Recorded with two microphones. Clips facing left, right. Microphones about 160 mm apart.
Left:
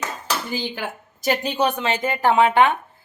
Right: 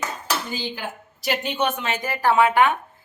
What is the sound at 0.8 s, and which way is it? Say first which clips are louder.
Speech: left 3 dB; 45° left (ahead or behind).